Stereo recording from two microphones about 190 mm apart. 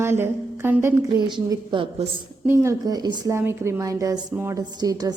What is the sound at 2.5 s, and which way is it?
A woman's voice, 15° right (ahead or behind).